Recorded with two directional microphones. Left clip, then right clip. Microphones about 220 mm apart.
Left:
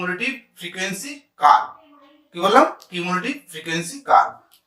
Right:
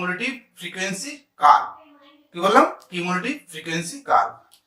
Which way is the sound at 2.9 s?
5° left (ahead or behind).